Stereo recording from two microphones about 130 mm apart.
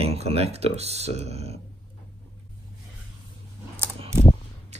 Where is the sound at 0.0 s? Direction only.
50° right (ahead or behind).